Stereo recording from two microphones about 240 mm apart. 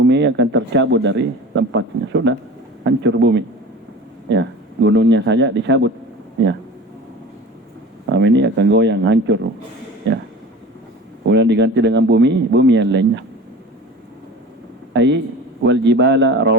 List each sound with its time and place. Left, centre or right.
0.0 s a man's voice: right
8.1 s a man's voice: right
11.3 s a man's voice: right
14.9 s a man's voice: right